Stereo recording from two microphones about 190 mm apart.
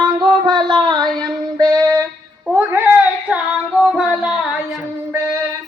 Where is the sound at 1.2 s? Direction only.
20° right (ahead or behind).